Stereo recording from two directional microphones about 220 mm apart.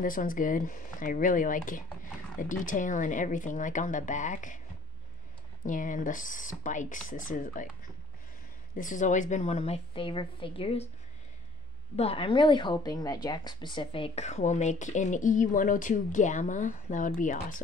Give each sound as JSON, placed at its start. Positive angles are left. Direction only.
{"t": 0.0, "sound": "a woman's voice", "side_deg": 40}
{"t": 5.7, "sound": "a woman's voice", "side_deg": 35}
{"t": 8.7, "sound": "a woman's voice", "side_deg": 35}
{"t": 12.0, "sound": "a woman's voice", "side_deg": 25}